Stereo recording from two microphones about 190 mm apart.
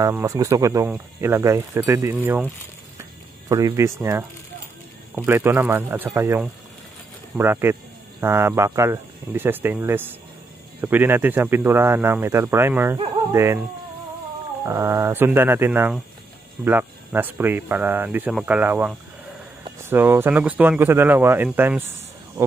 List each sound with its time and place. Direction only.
0.0 s speech: 15° right (ahead or behind)
3.4 s speech: 15° right (ahead or behind)
14.6 s speech: 15° right (ahead or behind)